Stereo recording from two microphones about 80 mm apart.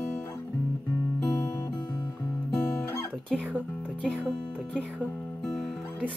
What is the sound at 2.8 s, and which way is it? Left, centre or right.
Guitar, left.